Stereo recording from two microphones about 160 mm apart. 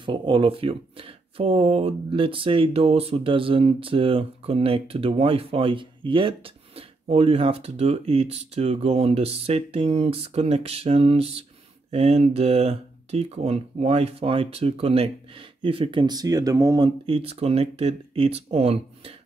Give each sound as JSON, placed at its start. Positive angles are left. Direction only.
{"t": 0.0, "sound": "speech", "side_deg": -30}